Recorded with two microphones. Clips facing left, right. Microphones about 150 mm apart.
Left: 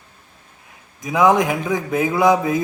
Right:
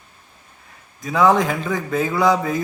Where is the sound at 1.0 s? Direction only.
15° left (ahead or behind).